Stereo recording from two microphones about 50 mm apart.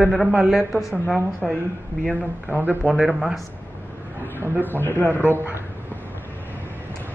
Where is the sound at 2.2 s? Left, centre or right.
Right.